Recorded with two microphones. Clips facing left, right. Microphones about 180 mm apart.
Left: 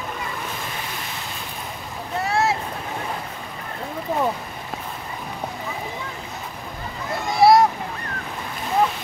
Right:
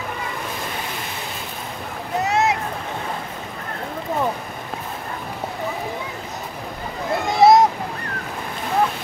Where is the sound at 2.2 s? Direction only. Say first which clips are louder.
Right 2 dB; 20° right (ahead or behind).